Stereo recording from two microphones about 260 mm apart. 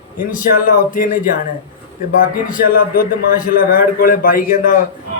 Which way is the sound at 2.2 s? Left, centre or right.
Left.